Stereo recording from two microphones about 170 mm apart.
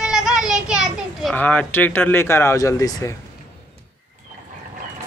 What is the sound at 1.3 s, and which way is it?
Speech, 10° left (ahead or behind).